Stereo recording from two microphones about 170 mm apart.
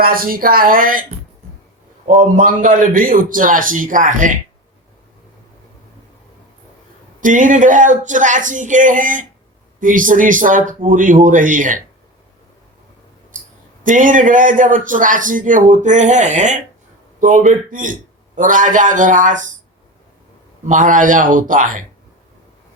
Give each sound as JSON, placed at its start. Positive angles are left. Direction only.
{"t": 0.0, "sound": "speech", "side_deg": -55}
{"t": 2.0, "sound": "a man's voice", "side_deg": -50}
{"t": 7.2, "sound": "a man's voice", "side_deg": -50}
{"t": 13.8, "sound": "a man's voice", "side_deg": -50}
{"t": 20.7, "sound": "a man's voice", "side_deg": -50}